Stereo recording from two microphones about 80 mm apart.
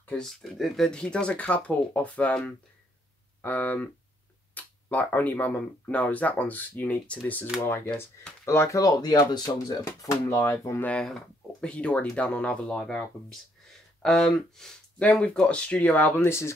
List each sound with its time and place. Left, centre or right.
0.2 s speech: centre; by 7.2 s left
7.6 s speech: left
9.8 s speech: left
11.0 s speech: centre
11.7 s speech: centre
16.3 s speech: left